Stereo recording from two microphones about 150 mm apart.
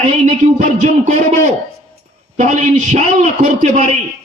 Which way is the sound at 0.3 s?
50° right (ahead or behind).